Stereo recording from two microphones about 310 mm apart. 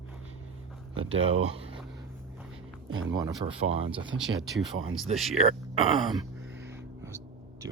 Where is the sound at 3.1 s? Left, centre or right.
Centre.